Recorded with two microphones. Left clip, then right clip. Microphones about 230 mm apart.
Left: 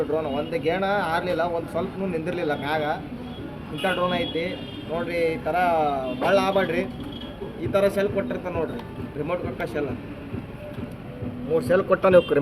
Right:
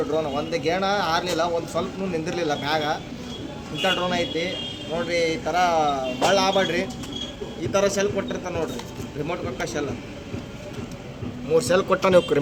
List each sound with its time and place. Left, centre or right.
0.1 s a man's voice: centre
11.5 s a man's voice: centre